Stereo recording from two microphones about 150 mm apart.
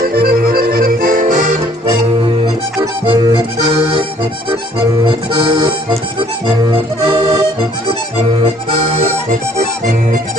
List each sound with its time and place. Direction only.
0.0 s accordion: 80° right
2.4 s music: 30° right (ahead or behind)
5.0 s accordion: 35° right (ahead or behind)
6.7 s accordion: 35° right (ahead or behind)